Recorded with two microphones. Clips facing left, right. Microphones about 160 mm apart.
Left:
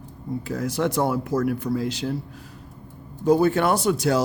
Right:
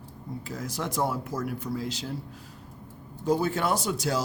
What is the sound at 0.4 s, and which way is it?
Speech, 65° left (ahead or behind).